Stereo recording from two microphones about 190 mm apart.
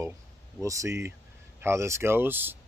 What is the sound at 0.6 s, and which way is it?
Speech, 15° right (ahead or behind).